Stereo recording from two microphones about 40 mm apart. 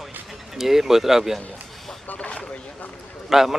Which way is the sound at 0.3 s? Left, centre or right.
Centre.